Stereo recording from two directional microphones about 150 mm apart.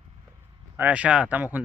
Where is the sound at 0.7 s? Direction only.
10° right (ahead or behind).